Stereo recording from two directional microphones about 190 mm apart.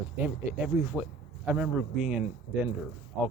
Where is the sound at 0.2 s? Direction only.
10° right (ahead or behind).